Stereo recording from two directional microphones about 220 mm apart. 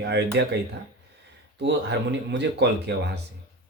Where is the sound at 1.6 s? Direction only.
50° right (ahead or behind).